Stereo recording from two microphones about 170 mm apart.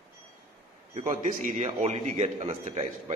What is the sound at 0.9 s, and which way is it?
A man's voice, 50° right (ahead or behind).